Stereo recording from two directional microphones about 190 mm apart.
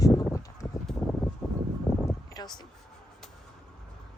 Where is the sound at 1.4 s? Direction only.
5° left (ahead or behind).